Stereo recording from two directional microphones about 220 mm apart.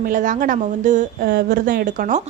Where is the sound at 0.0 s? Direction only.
35° right (ahead or behind).